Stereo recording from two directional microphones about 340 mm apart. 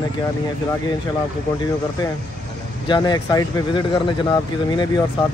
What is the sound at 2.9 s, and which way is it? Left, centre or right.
Speech, centre.